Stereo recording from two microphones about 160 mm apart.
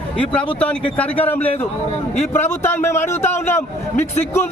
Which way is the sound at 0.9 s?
10° left (ahead or behind).